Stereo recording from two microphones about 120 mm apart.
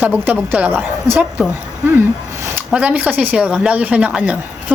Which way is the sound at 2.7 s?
10° right (ahead or behind).